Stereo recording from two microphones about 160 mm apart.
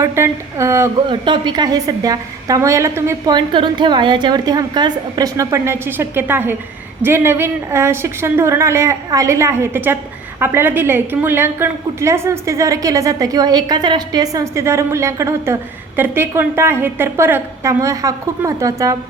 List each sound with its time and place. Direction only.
0.0 s a woman's voice: 15° right (ahead or behind)
1.1 s a woman's voice: 30° right (ahead or behind)
3.3 s a woman's voice: 30° right (ahead or behind)